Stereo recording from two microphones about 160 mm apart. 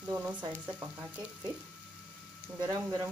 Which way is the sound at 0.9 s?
10° right (ahead or behind).